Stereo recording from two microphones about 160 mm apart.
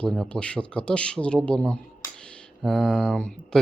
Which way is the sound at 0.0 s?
5° left (ahead or behind).